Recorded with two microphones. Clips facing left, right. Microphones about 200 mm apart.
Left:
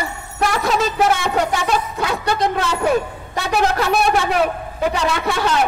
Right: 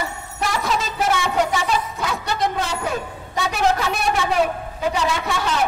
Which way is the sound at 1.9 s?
60° left (ahead or behind).